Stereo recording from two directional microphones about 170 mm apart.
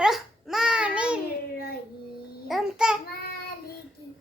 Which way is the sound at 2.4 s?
5° right (ahead or behind).